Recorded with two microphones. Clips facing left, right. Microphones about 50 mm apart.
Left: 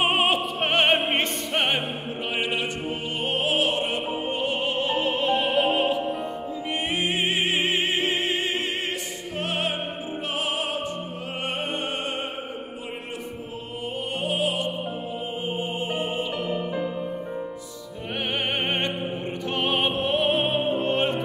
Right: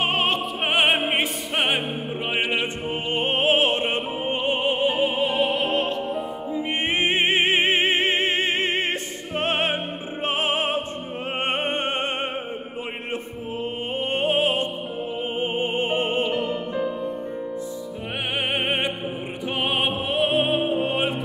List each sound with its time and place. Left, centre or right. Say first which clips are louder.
0.0 s opera: left 1 dB; centre
0.6 s opera: right 2 dB; centre
2.3 s opera: right 2 dB; right; by 5.9 s centre
6.5 s music: right 5 dB; right
11.4 s opera: right 4 dB; right
13.9 s music: right 5 dB; right
18.5 s opera: right 3 dB; centre
19.6 s music: even; centre